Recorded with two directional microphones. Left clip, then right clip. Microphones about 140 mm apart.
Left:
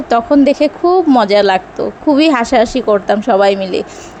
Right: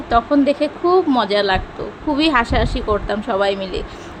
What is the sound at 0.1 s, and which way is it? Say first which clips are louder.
A woman's voice: left 5 dB; 45° left (ahead or behind).